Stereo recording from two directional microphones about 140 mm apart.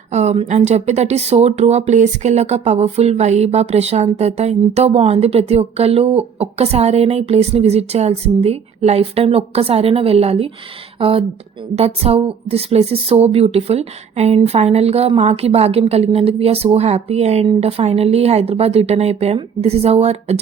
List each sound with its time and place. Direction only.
0.1 s speech: 55° right (ahead or behind)